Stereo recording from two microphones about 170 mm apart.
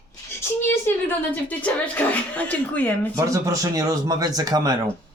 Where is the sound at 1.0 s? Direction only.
10° left (ahead or behind).